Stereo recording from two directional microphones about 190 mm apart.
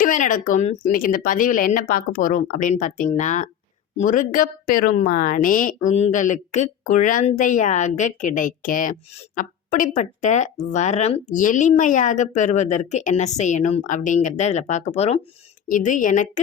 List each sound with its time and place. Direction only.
0.0 s speech: 45° left (ahead or behind)